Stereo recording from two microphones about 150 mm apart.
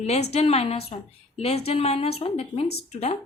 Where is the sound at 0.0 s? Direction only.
45° left (ahead or behind).